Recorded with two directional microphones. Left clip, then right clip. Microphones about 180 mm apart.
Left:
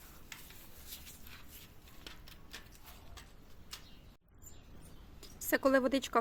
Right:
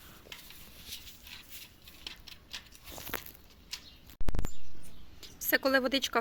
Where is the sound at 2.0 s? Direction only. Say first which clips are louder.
Right 7 dB; 50° left (ahead or behind).